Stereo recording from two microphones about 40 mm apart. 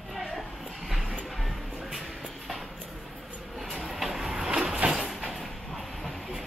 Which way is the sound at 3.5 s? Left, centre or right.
Centre.